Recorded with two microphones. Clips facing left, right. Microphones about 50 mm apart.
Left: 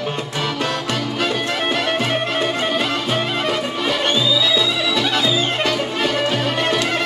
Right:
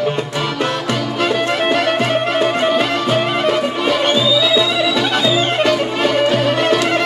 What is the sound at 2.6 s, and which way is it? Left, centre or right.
Music, centre.